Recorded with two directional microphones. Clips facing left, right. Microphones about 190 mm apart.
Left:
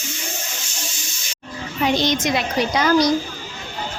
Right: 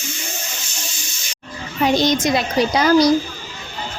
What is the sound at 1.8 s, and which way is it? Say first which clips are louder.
A child's voice: right 3 dB; 40° right (ahead or behind).